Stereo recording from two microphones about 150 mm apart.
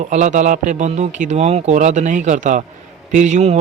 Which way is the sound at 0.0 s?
55° right (ahead or behind).